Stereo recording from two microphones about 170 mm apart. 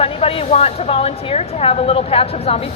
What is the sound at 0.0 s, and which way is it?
Speech, 35° left (ahead or behind).